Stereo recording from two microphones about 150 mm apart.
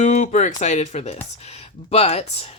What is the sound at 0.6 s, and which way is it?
Speech, 50° left (ahead or behind).